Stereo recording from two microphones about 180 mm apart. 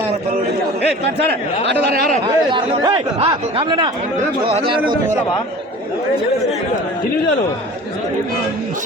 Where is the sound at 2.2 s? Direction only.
25° right (ahead or behind).